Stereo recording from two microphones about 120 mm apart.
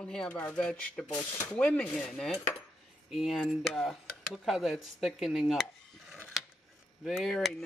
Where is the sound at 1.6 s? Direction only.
10° left (ahead or behind).